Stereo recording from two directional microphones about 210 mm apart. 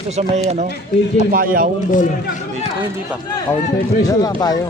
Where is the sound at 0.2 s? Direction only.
30° right (ahead or behind).